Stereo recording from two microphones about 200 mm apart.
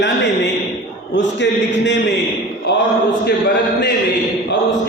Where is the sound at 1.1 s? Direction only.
60° left (ahead or behind).